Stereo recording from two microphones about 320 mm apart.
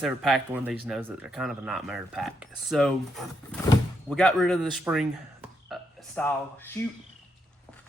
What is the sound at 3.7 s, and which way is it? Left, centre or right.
Door, centre.